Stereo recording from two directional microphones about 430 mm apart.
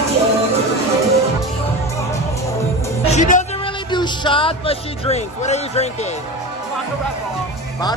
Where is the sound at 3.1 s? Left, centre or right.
Centre.